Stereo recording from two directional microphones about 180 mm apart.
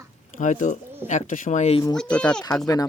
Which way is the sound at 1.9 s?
5° left (ahead or behind).